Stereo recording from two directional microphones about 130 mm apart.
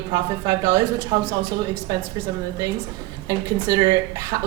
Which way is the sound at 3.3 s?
30° right (ahead or behind).